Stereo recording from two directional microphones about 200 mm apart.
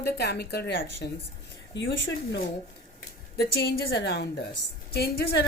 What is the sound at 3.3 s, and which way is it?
A woman's voice, 50° left (ahead or behind).